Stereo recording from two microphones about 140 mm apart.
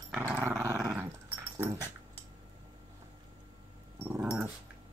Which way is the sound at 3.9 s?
15° right (ahead or behind).